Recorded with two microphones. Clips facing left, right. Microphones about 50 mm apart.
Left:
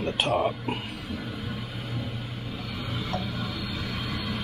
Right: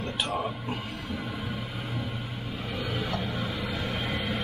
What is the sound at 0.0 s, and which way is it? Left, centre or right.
Speech, left.